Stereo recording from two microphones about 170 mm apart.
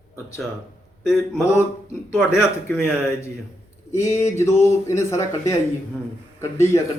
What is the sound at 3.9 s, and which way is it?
Speech, 15° left (ahead or behind).